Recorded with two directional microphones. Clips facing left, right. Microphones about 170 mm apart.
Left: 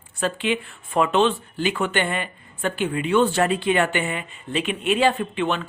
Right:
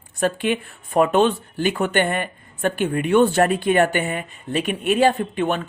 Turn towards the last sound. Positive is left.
turn(degrees=-45)  # may be behind; listen again after turning